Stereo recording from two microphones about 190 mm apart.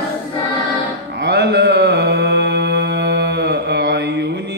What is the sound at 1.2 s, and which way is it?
Mantra, 60° right (ahead or behind).